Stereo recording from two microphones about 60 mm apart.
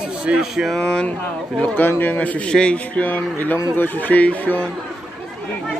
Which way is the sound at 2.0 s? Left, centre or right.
Left.